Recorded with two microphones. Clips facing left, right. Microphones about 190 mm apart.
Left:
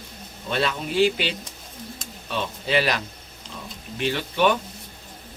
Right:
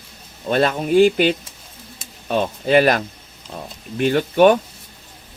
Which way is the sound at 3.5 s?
50° right (ahead or behind).